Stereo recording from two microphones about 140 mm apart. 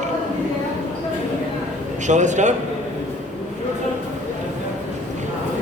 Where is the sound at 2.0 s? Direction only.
60° right (ahead or behind).